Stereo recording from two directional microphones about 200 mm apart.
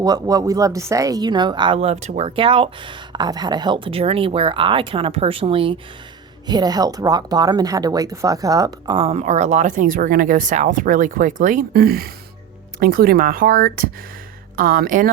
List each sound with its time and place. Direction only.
0.0 s speech: 20° right (ahead or behind); by 15.1 s 45° right (ahead or behind)